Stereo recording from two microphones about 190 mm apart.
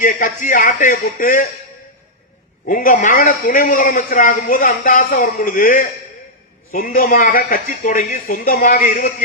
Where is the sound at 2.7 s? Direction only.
45° left (ahead or behind).